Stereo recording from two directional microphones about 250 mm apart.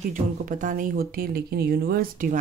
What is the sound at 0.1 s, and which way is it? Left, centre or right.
Speech, right.